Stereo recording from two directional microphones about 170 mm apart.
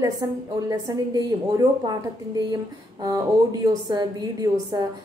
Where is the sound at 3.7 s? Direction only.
20° right (ahead or behind).